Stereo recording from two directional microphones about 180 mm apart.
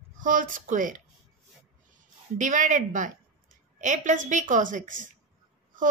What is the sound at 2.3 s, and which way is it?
Speech, 45° right (ahead or behind).